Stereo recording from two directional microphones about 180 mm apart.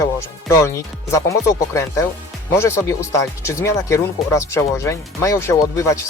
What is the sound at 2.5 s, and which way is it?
Speech, 15° left (ahead or behind).